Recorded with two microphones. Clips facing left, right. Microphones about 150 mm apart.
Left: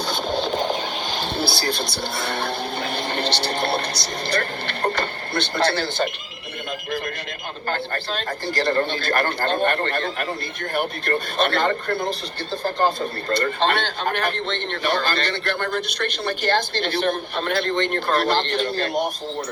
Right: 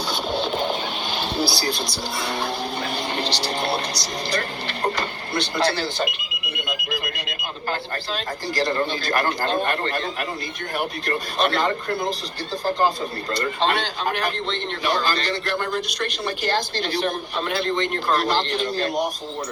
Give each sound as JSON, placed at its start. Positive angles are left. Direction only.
{"t": 0.1, "sound": "music", "side_deg": 45}
{"t": 1.5, "sound": "a man's voice", "side_deg": 55}
{"t": 7.7, "sound": "a man's voice", "side_deg": 55}